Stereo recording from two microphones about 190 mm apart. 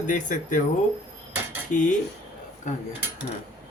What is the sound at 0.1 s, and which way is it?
Speech, 45° left (ahead or behind).